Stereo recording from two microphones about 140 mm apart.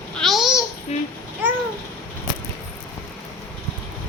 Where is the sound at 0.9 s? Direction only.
50° left (ahead or behind).